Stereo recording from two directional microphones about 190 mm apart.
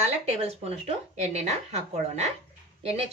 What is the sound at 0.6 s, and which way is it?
Speech, 35° right (ahead or behind).